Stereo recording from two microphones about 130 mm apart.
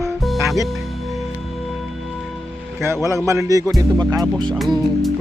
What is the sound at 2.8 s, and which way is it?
Speech, 20° right (ahead or behind).